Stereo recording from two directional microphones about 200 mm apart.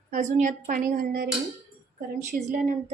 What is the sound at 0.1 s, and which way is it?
A woman's voice, 40° right (ahead or behind).